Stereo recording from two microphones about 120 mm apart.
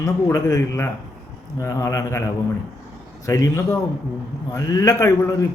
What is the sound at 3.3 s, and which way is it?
Speech, 25° left (ahead or behind).